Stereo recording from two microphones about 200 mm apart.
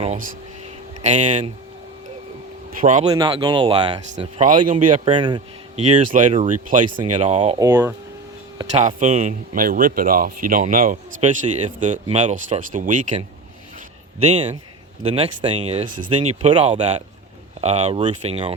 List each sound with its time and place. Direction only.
1.0 s speech: 35° right (ahead or behind)
2.8 s speech: 35° right (ahead or behind)
3.1 s speech: 25° right (ahead or behind)
5.8 s speech: 40° right (ahead or behind)
7.6 s speech: 10° right (ahead or behind)
8.7 s speech: 35° right (ahead or behind)
14.2 s speech: 30° right (ahead or behind)